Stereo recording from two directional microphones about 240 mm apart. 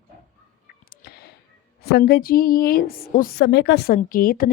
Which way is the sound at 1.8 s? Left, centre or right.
Left.